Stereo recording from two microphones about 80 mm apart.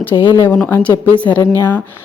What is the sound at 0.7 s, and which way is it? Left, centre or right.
A woman's voice, left.